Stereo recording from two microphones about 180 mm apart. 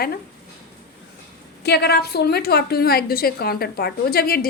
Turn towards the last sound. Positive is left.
turn(degrees=60)  # may be behind; listen again after turning